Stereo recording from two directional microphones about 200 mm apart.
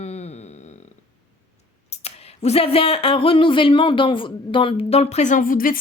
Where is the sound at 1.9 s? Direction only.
30° left (ahead or behind).